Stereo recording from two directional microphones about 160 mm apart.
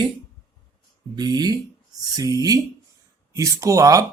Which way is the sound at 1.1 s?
25° right (ahead or behind).